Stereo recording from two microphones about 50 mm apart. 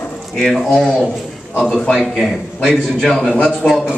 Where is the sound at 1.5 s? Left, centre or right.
Centre.